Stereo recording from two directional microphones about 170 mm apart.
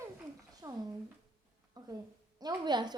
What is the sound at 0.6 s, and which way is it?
Speech, 20° right (ahead or behind).